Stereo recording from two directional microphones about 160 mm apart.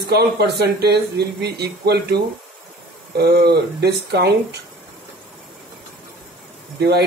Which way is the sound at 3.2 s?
85° right.